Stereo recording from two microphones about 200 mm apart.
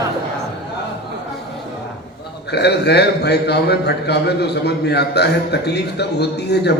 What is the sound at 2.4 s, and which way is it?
A man's voice, 55° left (ahead or behind).